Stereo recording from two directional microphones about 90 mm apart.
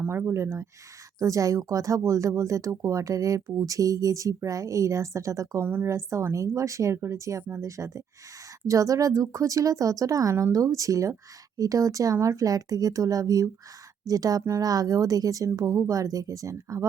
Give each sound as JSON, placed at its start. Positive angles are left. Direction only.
{"t": 0.1, "sound": "speech", "side_deg": -30}
{"t": 5.6, "sound": "speech", "side_deg": -25}
{"t": 5.9, "sound": "speech", "side_deg": -35}